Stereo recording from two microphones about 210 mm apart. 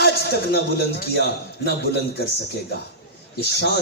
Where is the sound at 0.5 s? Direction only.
50° left (ahead or behind).